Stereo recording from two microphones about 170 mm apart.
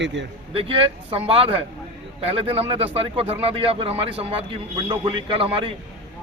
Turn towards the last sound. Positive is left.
turn(degrees=-30)  # may be behind; listen again after turning